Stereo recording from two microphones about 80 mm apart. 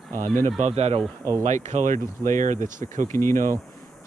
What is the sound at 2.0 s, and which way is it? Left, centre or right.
Speech, left.